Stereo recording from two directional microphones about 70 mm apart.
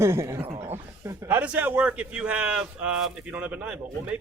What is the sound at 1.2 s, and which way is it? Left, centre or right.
A man's voice, right.